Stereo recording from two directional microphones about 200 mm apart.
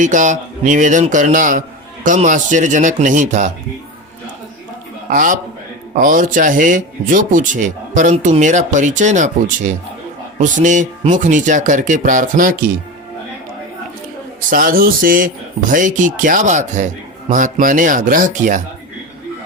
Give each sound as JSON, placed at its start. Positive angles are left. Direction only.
{"t": 0.0, "sound": "speech", "side_deg": -40}
{"t": 5.0, "sound": "a man's voice", "side_deg": -40}
{"t": 14.5, "sound": "speech", "side_deg": -45}